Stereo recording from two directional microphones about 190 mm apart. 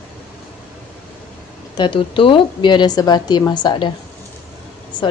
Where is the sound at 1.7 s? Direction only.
25° left (ahead or behind).